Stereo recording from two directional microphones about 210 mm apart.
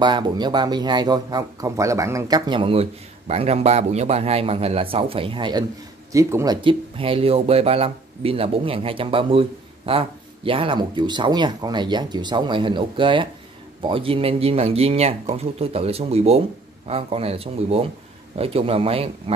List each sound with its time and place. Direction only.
0.0 s speech: 20° right (ahead or behind)